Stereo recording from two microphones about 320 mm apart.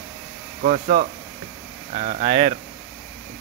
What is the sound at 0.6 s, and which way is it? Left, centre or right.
Speech, right.